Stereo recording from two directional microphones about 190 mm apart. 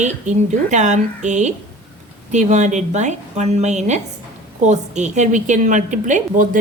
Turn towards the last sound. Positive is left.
turn(degrees=-45)  # may be behind; listen again after turning